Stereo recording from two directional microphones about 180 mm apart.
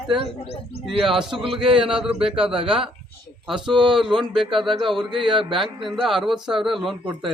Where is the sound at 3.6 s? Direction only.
25° right (ahead or behind).